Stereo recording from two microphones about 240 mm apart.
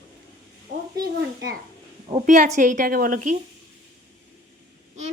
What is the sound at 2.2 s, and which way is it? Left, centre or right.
A woman's voice, right.